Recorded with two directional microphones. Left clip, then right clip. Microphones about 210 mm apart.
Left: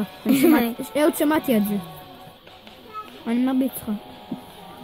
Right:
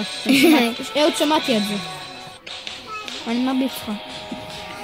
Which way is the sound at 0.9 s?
25° left (ahead or behind).